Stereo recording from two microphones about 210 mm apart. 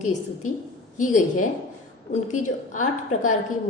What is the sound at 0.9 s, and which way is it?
Speech, 35° left (ahead or behind).